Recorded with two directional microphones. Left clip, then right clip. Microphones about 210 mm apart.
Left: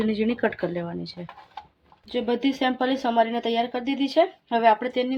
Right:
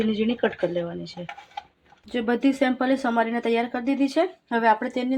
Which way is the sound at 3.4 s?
10° left (ahead or behind).